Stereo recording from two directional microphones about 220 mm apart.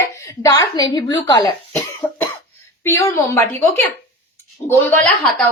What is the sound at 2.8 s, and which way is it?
Speech, 10° left (ahead or behind).